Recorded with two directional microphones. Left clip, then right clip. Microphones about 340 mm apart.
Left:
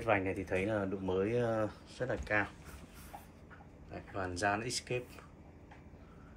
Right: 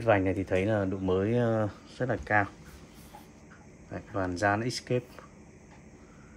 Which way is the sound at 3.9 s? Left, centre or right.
Right.